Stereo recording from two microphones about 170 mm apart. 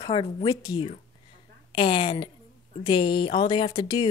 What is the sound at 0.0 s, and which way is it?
Speech, 30° left (ahead or behind).